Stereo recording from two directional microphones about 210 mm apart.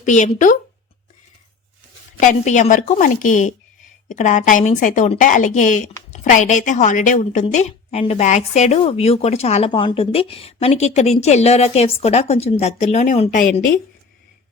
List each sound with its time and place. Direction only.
0.0 s a woman's voice: 35° left (ahead or behind)
2.2 s a woman's voice: 35° left (ahead or behind)